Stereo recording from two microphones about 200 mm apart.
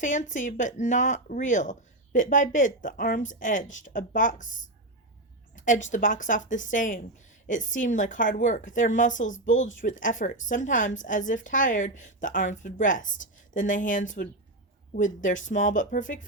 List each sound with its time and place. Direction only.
0.0 s a woman's voice: 40° left (ahead or behind)